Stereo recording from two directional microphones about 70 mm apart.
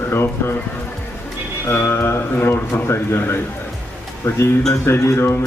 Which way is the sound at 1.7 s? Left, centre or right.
Left.